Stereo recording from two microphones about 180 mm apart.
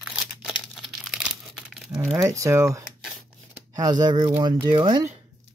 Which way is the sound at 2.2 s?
15° right (ahead or behind).